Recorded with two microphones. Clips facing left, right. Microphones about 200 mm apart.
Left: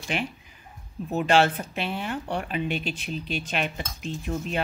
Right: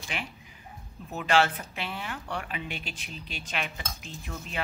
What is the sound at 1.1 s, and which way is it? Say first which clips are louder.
Speech: left 4 dB; 25° left (ahead or behind).